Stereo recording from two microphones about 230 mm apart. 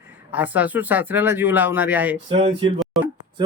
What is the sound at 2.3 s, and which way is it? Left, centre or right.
Speech, right.